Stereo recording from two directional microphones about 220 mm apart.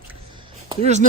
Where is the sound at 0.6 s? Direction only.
30° right (ahead or behind).